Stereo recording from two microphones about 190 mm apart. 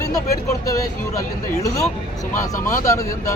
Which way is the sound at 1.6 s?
15° left (ahead or behind).